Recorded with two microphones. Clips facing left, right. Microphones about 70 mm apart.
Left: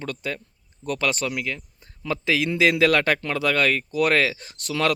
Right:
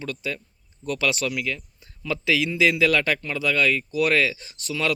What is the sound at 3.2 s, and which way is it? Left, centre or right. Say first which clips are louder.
Speech: left 1 dB; left.